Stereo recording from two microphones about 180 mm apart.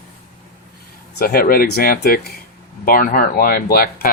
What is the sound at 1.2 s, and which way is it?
Speech, 55° left (ahead or behind).